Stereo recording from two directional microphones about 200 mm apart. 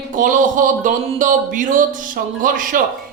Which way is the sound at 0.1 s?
40° right (ahead or behind).